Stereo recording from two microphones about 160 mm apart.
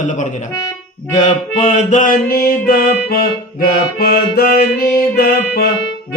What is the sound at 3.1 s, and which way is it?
Music, 75° left (ahead or behind).